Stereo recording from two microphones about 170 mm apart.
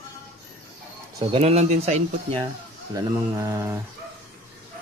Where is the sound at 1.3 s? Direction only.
35° right (ahead or behind).